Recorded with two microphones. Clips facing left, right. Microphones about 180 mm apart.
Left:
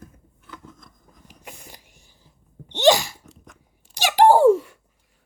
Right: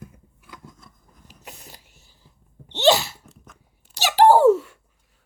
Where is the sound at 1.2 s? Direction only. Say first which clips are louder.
Left 1 dB; 55° left (ahead or behind).